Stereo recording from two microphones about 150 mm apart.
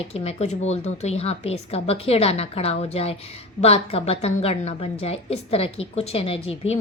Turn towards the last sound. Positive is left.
turn(degrees=40)  # may be behind; listen again after turning